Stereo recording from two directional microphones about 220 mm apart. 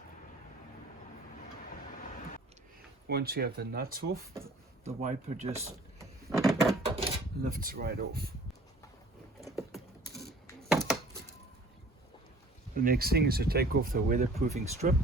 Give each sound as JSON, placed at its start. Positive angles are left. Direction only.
{"t": 3.1, "sound": "speech", "side_deg": -45}
{"t": 4.9, "sound": "speech", "side_deg": -30}
{"t": 6.4, "sound": "a sound", "side_deg": 0}
{"t": 6.8, "sound": "drawer open or close", "side_deg": -25}
{"t": 7.5, "sound": "speech", "side_deg": -40}
{"t": 10.7, "sound": "chopping", "side_deg": 0}
{"t": 12.7, "sound": "speech", "side_deg": -40}